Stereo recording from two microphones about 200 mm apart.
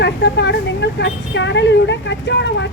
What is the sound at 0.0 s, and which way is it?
Speech, 60° left (ahead or behind).